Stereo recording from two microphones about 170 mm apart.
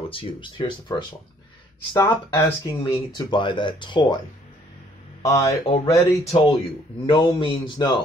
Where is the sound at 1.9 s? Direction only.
15° left (ahead or behind).